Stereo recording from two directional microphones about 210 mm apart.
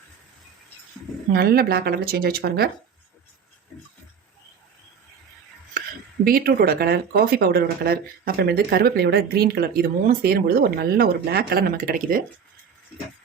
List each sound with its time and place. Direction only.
1.3 s speech: 45° right (ahead or behind)
6.2 s speech: 45° right (ahead or behind)